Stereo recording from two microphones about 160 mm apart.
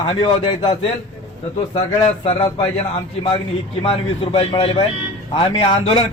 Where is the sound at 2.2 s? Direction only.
35° left (ahead or behind).